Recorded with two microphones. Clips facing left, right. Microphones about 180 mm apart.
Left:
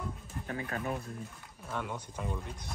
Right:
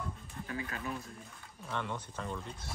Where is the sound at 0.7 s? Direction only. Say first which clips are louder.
Left 5 dB; 45° left (ahead or behind).